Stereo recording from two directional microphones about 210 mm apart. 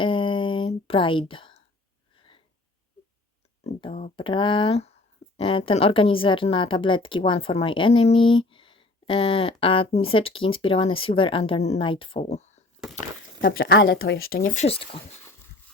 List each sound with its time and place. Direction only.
0.0 s a sound: 25° left (ahead or behind)
3.6 s speech: 25° left (ahead or behind)
13.7 s speech: 50° left (ahead or behind)
14.2 s speech: 75° left (ahead or behind)
14.4 s speech: 35° left (ahead or behind)